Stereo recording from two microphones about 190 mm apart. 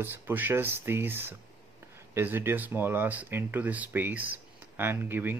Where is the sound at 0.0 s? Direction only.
10° right (ahead or behind).